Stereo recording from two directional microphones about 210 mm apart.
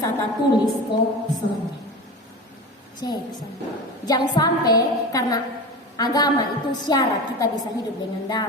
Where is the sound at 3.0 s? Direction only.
20° left (ahead or behind).